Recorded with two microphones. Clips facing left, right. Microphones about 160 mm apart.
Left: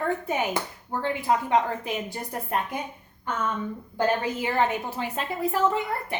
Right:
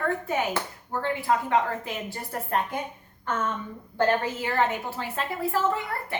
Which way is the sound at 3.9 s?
15° left (ahead or behind).